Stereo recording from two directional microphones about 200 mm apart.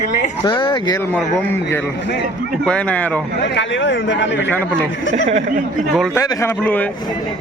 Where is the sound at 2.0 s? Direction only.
55° left (ahead or behind).